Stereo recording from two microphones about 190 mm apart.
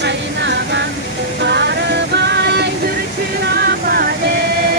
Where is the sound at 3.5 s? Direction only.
55° right (ahead or behind).